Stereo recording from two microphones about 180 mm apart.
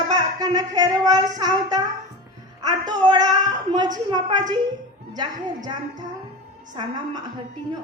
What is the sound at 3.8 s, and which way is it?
Speech, 25° right (ahead or behind).